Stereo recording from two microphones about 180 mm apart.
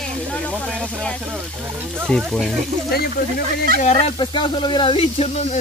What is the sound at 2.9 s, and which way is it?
Speech, 60° left (ahead or behind).